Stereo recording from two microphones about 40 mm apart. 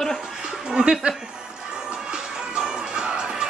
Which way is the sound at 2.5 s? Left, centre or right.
Centre.